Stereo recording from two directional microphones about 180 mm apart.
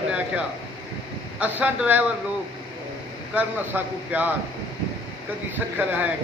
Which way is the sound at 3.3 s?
10° right (ahead or behind).